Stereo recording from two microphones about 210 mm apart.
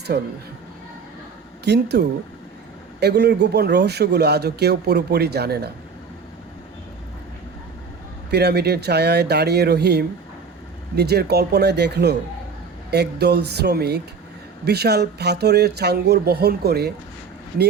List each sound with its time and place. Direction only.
0.1 s speech: 50° right (ahead or behind)
1.6 s speech: 50° right (ahead or behind)
8.3 s speech: 50° right (ahead or behind)